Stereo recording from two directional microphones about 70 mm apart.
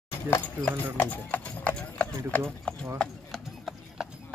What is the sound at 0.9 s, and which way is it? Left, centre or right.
Speech, left.